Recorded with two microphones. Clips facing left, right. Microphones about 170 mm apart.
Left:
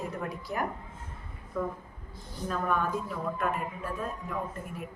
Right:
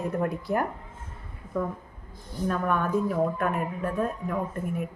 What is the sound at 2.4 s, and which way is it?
Speech, 55° right (ahead or behind).